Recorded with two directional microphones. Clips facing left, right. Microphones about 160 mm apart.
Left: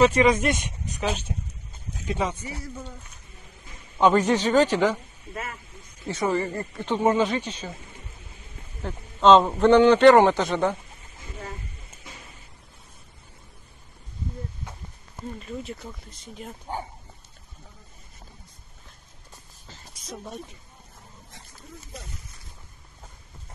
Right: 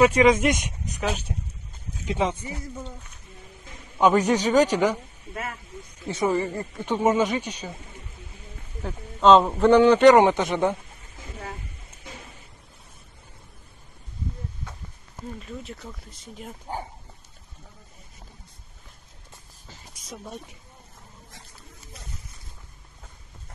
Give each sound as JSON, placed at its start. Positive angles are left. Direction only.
{"t": 0.0, "sound": "a man's voice", "side_deg": -15}
{"t": 1.3, "sound": "speech", "side_deg": 5}
{"t": 2.0, "sound": "speech", "side_deg": -20}
{"t": 4.0, "sound": "a man's voice", "side_deg": -10}
{"t": 6.0, "sound": "a man's voice", "side_deg": -15}
{"t": 8.8, "sound": "a man's voice", "side_deg": 0}
{"t": 15.3, "sound": "speech", "side_deg": 0}
{"t": 19.7, "sound": "a sound", "side_deg": -10}